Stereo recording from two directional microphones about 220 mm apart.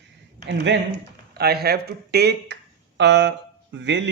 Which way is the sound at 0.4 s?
50° right (ahead or behind).